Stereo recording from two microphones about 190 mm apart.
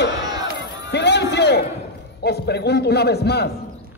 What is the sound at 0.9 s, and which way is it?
Music, 65° left (ahead or behind).